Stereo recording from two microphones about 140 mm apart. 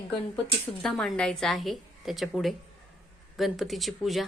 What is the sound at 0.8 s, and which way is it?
A woman's voice, centre (ahead or behind).